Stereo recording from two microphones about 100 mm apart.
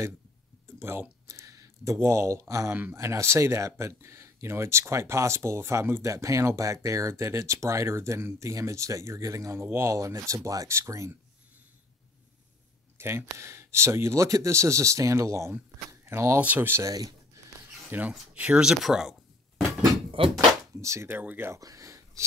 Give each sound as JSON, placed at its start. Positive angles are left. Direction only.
{"t": 0.7, "sound": "speech", "side_deg": -25}
{"t": 13.0, "sound": "speech", "side_deg": -25}
{"t": 16.3, "sound": "speech", "side_deg": -15}
{"t": 16.8, "sound": "speech", "side_deg": -40}
{"t": 17.8, "sound": "speech", "side_deg": -15}
{"t": 20.3, "sound": "speech", "side_deg": -30}
{"t": 21.5, "sound": "a sound", "side_deg": -35}